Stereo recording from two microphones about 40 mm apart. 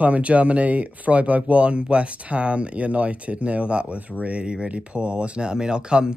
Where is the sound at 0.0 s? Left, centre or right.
Right.